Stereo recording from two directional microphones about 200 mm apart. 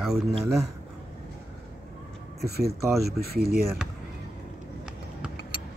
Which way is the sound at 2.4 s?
50° right (ahead or behind).